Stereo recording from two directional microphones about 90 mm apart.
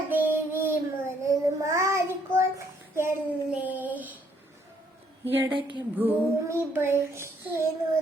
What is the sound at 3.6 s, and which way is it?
Child singing, 20° right (ahead or behind).